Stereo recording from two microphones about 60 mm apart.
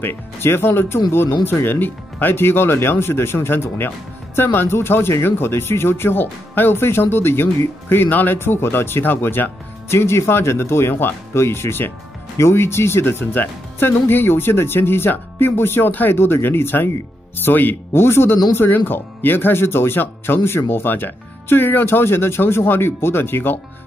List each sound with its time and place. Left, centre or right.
0.0 s speech: left
8.4 s speech: left